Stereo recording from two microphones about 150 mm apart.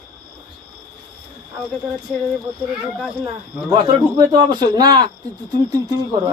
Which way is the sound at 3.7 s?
30° right (ahead or behind).